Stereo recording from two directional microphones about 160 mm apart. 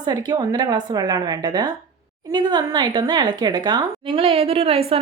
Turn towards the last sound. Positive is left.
turn(degrees=-35)  # may be behind; listen again after turning